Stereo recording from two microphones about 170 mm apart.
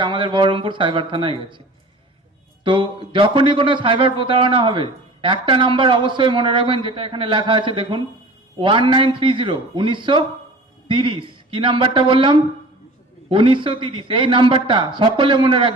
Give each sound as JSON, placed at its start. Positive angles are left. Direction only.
{"t": 0.0, "sound": "a man's voice", "side_deg": -30}
{"t": 2.6, "sound": "a man's voice", "side_deg": -30}